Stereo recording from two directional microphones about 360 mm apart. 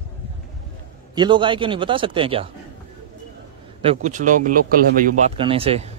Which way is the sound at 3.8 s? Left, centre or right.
Centre.